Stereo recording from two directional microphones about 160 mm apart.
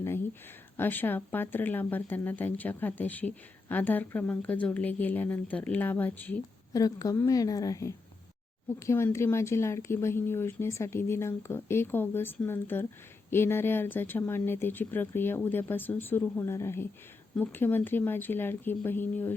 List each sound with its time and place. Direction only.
0.0 s a sound: 15° left (ahead or behind)
0.8 s speech: 10° left (ahead or behind)
6.7 s a woman's voice: 20° left (ahead or behind)